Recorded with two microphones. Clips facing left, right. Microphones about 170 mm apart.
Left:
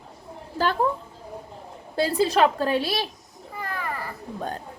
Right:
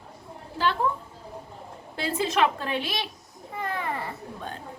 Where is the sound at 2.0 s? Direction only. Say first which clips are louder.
Left 4 dB; 35° left (ahead or behind).